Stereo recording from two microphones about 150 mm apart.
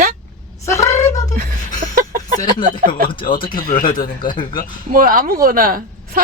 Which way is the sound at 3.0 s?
35° left (ahead or behind).